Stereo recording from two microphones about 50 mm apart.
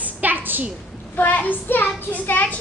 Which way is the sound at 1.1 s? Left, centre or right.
Left.